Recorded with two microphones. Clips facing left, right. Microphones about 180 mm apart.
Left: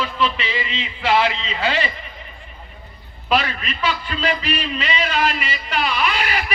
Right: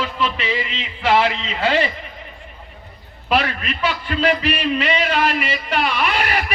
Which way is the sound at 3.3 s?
60° right (ahead or behind).